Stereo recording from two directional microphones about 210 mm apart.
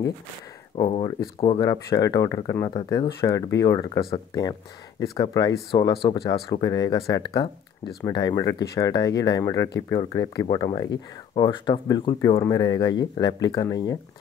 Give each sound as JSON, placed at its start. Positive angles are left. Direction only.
{"t": 0.7, "sound": "speech", "side_deg": 25}